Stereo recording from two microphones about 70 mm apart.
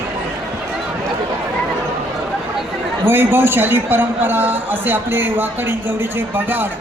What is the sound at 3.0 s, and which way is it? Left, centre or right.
A man's voice, right.